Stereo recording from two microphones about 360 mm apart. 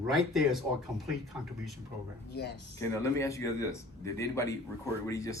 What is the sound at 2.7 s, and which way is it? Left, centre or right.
Speech, centre.